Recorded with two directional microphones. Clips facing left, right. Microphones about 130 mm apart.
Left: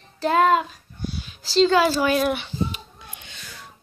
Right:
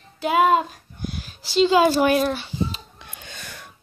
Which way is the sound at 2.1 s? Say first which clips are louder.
Right 1 dB; centre (ahead or behind).